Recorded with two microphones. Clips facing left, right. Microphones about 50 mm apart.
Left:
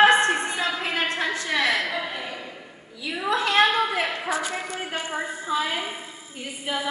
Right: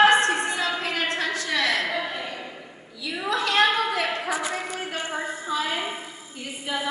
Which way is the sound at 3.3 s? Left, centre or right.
Left.